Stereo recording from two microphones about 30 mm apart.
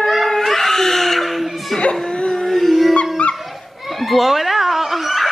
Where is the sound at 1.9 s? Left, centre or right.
Left.